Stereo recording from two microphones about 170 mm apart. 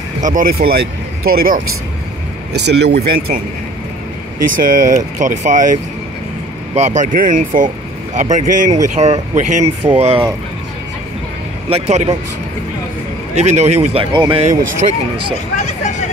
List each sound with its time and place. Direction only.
0.2 s speech: 50° right (ahead or behind)
2.5 s speech: 85° right
3.1 s speech: 60° right (ahead or behind)
4.5 s speech: 55° right (ahead or behind)
11.7 s speech: 40° right (ahead or behind)
13.4 s speech: 40° right (ahead or behind)
15.5 s speech: 45° left (ahead or behind)